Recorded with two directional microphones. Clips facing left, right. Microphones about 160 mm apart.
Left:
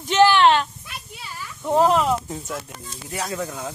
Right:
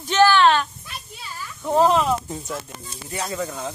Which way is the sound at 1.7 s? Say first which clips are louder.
Even; 10° left (ahead or behind).